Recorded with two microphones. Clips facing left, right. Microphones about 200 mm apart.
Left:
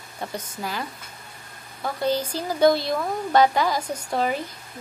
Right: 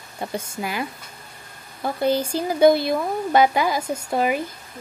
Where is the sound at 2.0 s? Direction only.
10° right (ahead or behind).